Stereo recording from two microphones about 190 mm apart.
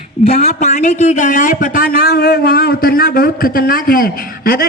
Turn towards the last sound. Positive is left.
turn(degrees=50)  # may be behind; listen again after turning